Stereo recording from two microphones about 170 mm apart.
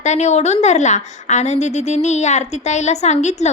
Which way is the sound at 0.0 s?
40° left (ahead or behind).